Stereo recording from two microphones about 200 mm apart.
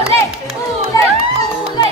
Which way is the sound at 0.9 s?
20° left (ahead or behind).